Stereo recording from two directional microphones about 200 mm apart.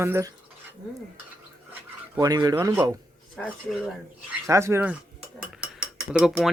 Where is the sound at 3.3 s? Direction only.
5° left (ahead or behind).